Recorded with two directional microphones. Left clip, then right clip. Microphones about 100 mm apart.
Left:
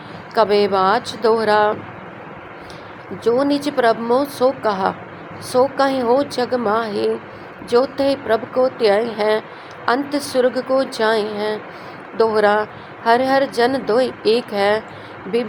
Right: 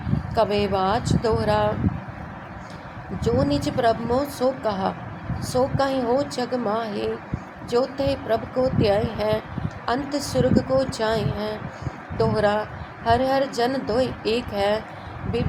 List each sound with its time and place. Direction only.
0.3 s speech: 45° left (ahead or behind)
3.2 s speech: 45° left (ahead or behind)